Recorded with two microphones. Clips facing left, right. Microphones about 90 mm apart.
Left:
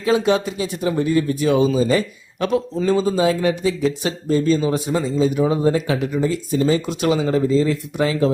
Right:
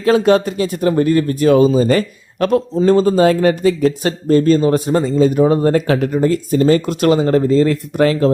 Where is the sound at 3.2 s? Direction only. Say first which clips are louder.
Right 6 dB; 55° right (ahead or behind).